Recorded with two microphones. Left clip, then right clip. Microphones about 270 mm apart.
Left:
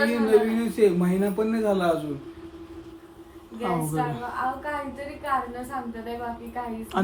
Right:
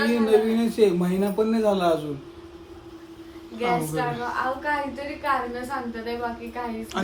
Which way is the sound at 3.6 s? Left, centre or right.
Centre.